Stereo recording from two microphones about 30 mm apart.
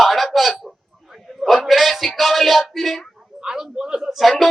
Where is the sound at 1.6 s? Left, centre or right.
Centre.